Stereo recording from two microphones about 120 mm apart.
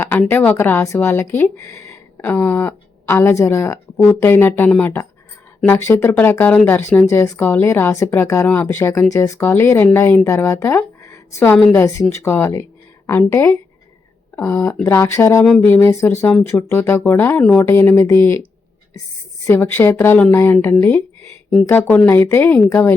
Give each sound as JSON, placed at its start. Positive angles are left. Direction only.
{"t": 0.0, "sound": "speech", "side_deg": 15}
{"t": 3.9, "sound": "speech", "side_deg": 5}
{"t": 4.2, "sound": "a woman's voice", "side_deg": 20}
{"t": 19.5, "sound": "speech", "side_deg": 20}